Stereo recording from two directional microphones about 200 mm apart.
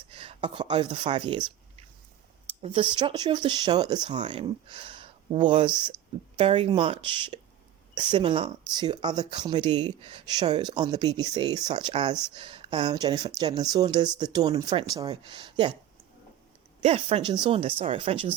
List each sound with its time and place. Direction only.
0.1 s speech: 25° right (ahead or behind)
2.6 s speech: 30° right (ahead or behind)
16.8 s speech: 30° right (ahead or behind)